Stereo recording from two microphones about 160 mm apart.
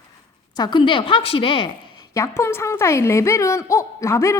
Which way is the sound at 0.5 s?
25° left (ahead or behind).